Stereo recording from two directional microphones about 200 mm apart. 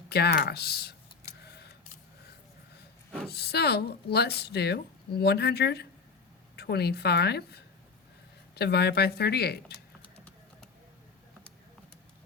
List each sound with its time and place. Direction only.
0.1 s speech: 55° left (ahead or behind)
1.5 s a sound: 55° left (ahead or behind)
3.2 s speech: 55° left (ahead or behind)